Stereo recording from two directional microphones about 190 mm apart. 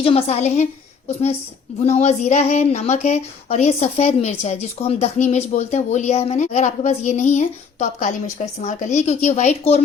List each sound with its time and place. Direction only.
0.0 s a woman's voice: 30° left (ahead or behind)